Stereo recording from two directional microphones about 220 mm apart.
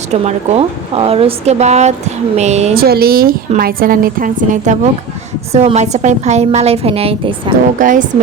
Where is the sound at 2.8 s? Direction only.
45° right (ahead or behind); by 7.5 s 25° right (ahead or behind).